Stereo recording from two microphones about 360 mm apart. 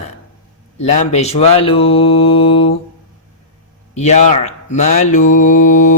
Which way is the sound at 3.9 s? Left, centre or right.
Centre.